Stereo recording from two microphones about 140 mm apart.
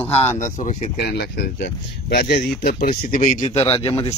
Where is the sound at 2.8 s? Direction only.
75° left (ahead or behind); by 3.8 s 45° left (ahead or behind).